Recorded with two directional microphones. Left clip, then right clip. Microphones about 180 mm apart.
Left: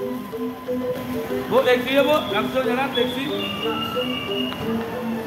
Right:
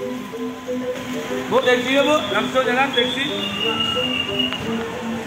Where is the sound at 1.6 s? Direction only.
50° right (ahead or behind).